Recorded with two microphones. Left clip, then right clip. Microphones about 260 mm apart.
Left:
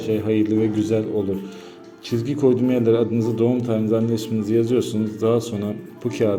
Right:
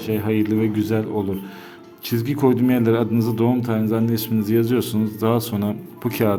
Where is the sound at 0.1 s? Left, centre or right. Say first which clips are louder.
Left 1 dB; centre.